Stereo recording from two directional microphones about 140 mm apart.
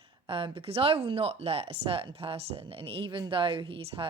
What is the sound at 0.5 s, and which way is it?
Speech, 45° right (ahead or behind).